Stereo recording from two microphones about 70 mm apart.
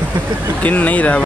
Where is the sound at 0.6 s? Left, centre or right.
Left.